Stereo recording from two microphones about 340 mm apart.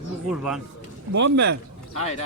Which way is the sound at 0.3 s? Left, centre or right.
Centre.